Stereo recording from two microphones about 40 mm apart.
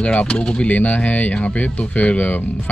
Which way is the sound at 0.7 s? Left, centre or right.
Left.